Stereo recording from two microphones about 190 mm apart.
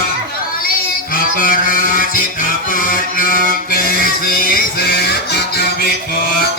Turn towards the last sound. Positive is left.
turn(degrees=55)  # may be behind; listen again after turning